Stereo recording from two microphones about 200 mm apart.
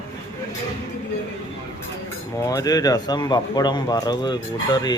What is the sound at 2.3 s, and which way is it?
Speech, 15° left (ahead or behind).